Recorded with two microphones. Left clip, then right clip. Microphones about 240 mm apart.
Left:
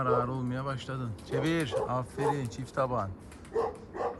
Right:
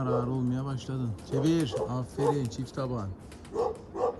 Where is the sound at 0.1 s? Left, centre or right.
Centre.